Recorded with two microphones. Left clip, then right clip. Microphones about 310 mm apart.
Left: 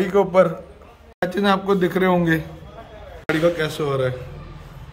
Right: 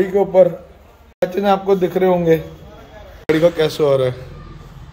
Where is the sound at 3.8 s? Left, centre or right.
Centre.